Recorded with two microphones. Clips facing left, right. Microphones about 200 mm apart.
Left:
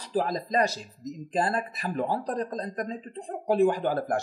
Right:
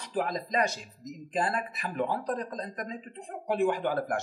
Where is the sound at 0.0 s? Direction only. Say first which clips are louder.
Left 3 dB; 35° left (ahead or behind).